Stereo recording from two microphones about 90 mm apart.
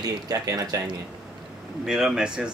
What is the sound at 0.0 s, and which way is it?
Speech, 45° right (ahead or behind).